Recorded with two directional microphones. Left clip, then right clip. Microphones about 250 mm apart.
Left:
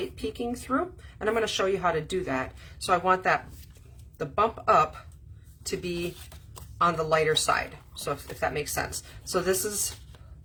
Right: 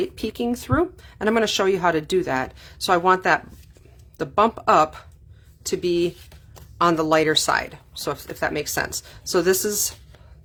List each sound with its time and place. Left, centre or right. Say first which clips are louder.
0.2 s speech: right 6 dB; right